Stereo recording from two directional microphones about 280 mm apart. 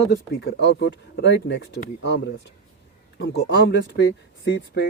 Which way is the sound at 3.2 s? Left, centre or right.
Left.